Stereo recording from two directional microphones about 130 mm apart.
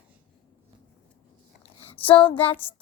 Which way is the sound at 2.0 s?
40° left (ahead or behind).